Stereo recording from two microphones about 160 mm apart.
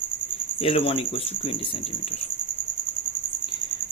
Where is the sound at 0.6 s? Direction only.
35° left (ahead or behind).